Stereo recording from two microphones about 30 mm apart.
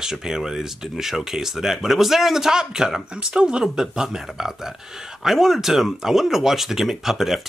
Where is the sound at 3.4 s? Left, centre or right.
Right.